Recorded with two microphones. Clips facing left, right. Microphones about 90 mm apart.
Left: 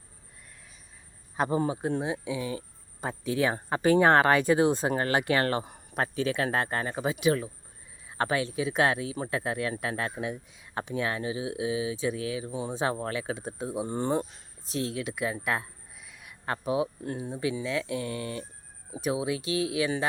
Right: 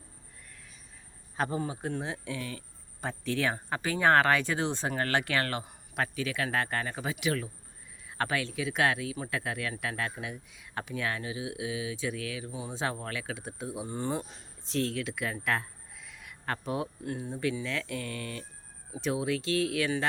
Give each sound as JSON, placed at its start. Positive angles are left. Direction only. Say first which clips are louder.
{"t": 1.4, "sound": "speech", "louder": "left 5 dB", "side_deg": 30}
{"t": 2.1, "sound": "speech", "louder": "left 5 dB", "side_deg": 10}
{"t": 3.7, "sound": "speech", "louder": "left 5 dB", "side_deg": 30}
{"t": 14.7, "sound": "speech", "louder": "even", "side_deg": 15}